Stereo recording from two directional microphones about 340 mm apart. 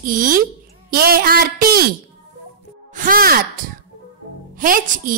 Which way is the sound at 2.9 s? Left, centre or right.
Right.